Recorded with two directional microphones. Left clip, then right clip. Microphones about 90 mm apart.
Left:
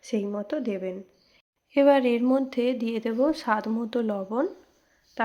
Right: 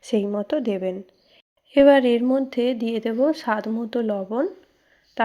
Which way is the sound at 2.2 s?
10° right (ahead or behind).